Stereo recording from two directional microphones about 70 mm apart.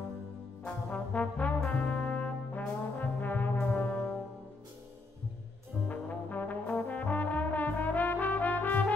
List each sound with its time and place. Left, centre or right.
0.8 s trombone: centre
5.9 s trombone: left